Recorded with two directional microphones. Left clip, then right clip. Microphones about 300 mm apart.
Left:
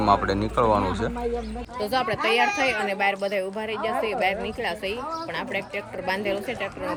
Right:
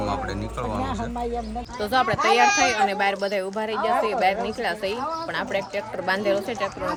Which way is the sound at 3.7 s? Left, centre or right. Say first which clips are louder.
Right 6 dB; right.